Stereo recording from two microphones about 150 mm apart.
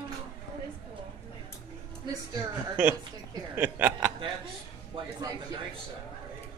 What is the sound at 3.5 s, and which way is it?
Speech, 15° right (ahead or behind).